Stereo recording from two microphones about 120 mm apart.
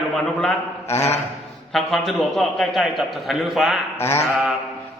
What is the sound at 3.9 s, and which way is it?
Mantra, 20° left (ahead or behind).